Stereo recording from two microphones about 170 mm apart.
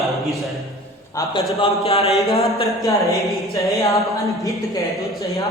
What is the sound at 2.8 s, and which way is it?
A woman's voice, 20° left (ahead or behind).